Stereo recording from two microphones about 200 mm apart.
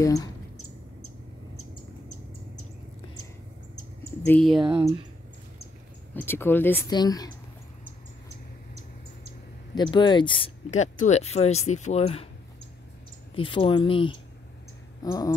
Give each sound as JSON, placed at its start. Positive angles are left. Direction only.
{"t": 0.0, "sound": "speech", "side_deg": 15}
{"t": 4.3, "sound": "speech", "side_deg": 0}
{"t": 4.6, "sound": "speech", "side_deg": -25}
{"t": 6.1, "sound": "speech", "side_deg": 10}
{"t": 9.8, "sound": "speech", "side_deg": 20}
{"t": 13.4, "sound": "speech", "side_deg": 25}